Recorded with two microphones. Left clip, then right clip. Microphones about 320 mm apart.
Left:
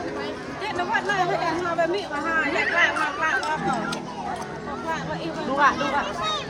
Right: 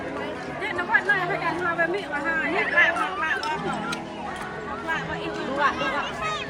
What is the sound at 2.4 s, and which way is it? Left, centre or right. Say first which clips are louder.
Speech: right 1 dB; left.